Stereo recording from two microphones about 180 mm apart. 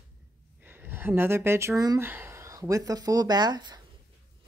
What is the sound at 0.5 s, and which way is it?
Speech, 10° right (ahead or behind).